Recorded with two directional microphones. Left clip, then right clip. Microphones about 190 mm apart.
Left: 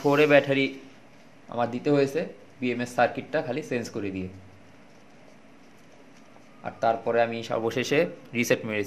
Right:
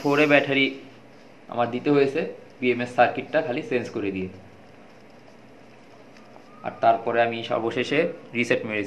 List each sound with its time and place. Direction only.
0.0 s speech: 60° left (ahead or behind)
6.6 s speech: 55° left (ahead or behind)